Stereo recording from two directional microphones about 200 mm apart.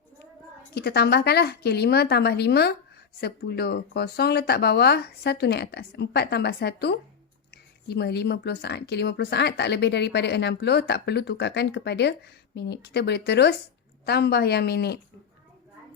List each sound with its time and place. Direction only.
0.7 s speech: 55° left (ahead or behind)